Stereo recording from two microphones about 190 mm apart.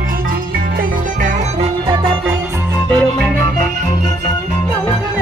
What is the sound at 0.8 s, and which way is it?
Music, 45° right (ahead or behind).